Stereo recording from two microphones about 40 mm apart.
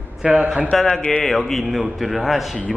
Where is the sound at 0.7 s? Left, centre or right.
Centre.